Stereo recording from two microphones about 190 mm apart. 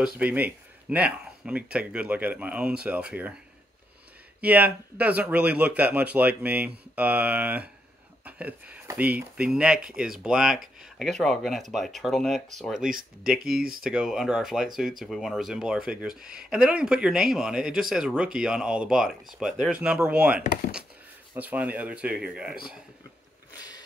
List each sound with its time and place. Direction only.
0.0 s speech: 10° right (ahead or behind)
4.4 s speech: 10° right (ahead or behind)
13.4 s speech: 50° right (ahead or behind)
13.8 s speech: centre (ahead or behind)